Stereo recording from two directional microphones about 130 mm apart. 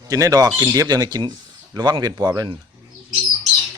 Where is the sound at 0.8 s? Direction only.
30° right (ahead or behind).